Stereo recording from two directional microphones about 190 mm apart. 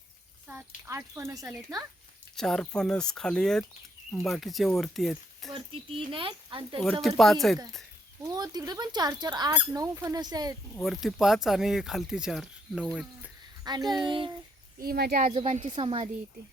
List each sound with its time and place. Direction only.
0.9 s speech: 15° right (ahead or behind)
2.3 s speech: 5° left (ahead or behind)
6.1 s speech: 25° right (ahead or behind)
7.2 s speech: centre (ahead or behind)
8.3 s speech: 20° right (ahead or behind)
10.8 s speech: centre (ahead or behind)
13.7 s speech: 20° right (ahead or behind)
14.8 s speech: 55° right (ahead or behind)
15.4 s speech: 30° right (ahead or behind)